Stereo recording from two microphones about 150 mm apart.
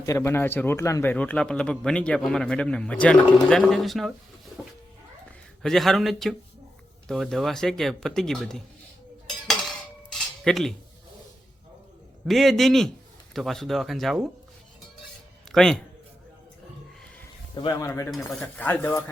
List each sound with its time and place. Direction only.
0.0 s a man's voice: 20° left (ahead or behind); by 4.1 s centre (ahead or behind)
5.6 s speech: centre (ahead or behind)
9.5 s cutlery: 5° left (ahead or behind)
12.2 s speech: centre (ahead or behind)
15.5 s speech: 5° left (ahead or behind)
17.5 s a man's voice: 30° left (ahead or behind)
17.7 s a man's voice: 20° left (ahead or behind)